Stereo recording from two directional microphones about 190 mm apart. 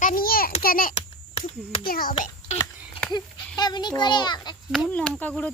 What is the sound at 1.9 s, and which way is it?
Speech, 50° left (ahead or behind).